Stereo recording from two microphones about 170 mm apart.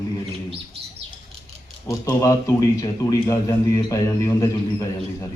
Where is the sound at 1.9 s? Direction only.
20° left (ahead or behind).